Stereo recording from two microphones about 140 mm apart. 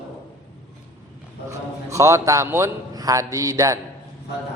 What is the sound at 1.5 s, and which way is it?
Speech, 20° right (ahead or behind).